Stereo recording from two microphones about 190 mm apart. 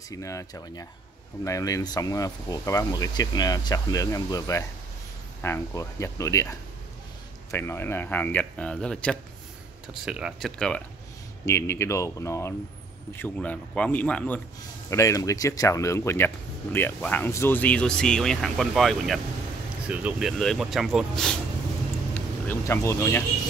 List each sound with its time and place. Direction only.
0.1 s speech: 15° left (ahead or behind)
7.5 s speech: 10° left (ahead or behind)
11.4 s speech: 15° left (ahead or behind)
22.5 s speech: 15° left (ahead or behind)